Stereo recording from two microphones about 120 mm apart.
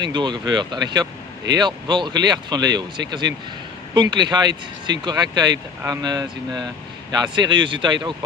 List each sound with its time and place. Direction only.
0.0 s speech: 40° right (ahead or behind)